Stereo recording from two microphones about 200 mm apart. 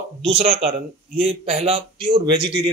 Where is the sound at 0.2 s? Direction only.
30° right (ahead or behind).